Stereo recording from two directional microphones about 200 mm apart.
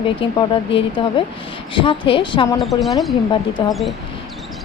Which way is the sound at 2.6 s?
Centre (ahead or behind).